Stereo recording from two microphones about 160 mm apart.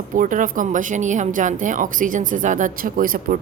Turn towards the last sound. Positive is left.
turn(degrees=-60)  # may be behind; listen again after turning